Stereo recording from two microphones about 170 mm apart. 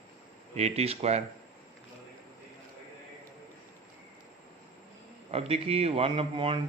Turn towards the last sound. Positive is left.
turn(degrees=-30)  # may be behind; listen again after turning